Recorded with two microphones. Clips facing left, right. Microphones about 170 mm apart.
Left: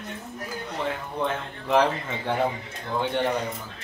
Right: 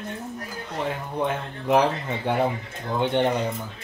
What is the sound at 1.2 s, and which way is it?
Speech, 15° right (ahead or behind).